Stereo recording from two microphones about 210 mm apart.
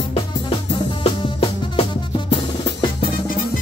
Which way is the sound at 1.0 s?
30° left (ahead or behind).